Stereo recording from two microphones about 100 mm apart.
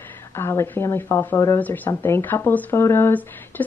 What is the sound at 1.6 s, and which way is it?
Speech, 15° left (ahead or behind).